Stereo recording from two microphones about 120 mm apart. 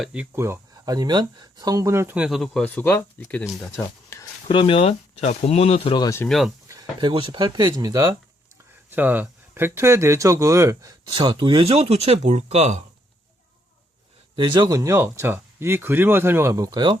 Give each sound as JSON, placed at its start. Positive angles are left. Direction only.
{"t": 0.0, "sound": "speech", "side_deg": -5}
{"t": 0.3, "sound": "speech", "side_deg": -20}
{"t": 0.9, "sound": "speech", "side_deg": -35}
{"t": 2.1, "sound": "speech", "side_deg": -10}
{"t": 2.4, "sound": "speech", "side_deg": 5}
{"t": 3.4, "sound": "speech", "side_deg": 0}
{"t": 3.8, "sound": "a sound", "side_deg": 25}
{"t": 4.4, "sound": "speech", "side_deg": 45}
{"t": 6.0, "sound": "speech", "side_deg": 25}
{"t": 6.2, "sound": "speech", "side_deg": 0}
{"t": 7.0, "sound": "speech", "side_deg": -40}
{"t": 8.9, "sound": "speech", "side_deg": -15}
{"t": 14.3, "sound": "speech", "side_deg": -40}